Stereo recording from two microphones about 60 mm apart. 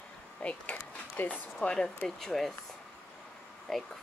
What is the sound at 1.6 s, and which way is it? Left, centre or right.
Speech, centre.